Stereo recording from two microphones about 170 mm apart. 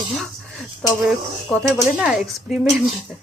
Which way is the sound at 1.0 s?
Centre (ahead or behind).